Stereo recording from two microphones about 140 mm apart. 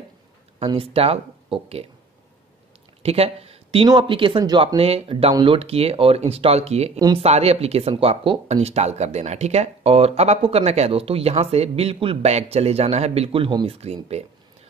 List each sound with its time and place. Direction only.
0.7 s speech: 40° right (ahead or behind)
3.0 s a sound: 45° right (ahead or behind)
3.8 s speech: 35° right (ahead or behind)
4.7 s speech: 45° right (ahead or behind)
13.7 s speech: 50° right (ahead or behind)